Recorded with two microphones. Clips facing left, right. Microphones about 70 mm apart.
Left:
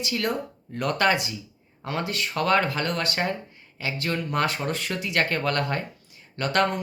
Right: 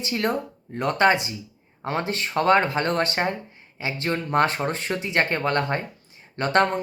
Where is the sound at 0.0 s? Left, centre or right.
Right.